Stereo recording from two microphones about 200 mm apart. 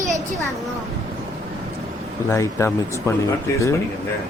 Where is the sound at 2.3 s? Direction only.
15° left (ahead or behind).